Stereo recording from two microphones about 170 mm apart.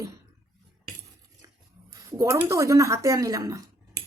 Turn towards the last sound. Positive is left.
turn(degrees=-20)  # may be behind; listen again after turning